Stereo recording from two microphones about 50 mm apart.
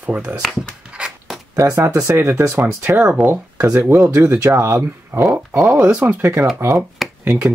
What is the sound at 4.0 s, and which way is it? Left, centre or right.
Speech, right.